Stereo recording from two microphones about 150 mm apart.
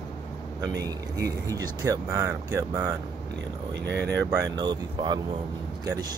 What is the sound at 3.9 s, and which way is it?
Speech, 10° left (ahead or behind).